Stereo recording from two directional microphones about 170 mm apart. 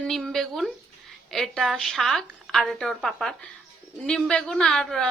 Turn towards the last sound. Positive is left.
turn(degrees=5)  # may be behind; listen again after turning